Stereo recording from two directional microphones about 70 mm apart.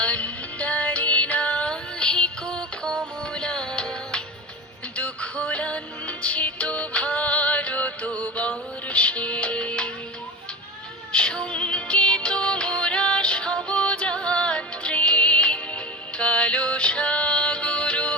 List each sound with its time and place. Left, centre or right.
0.0 s music: centre
11.1 s music: centre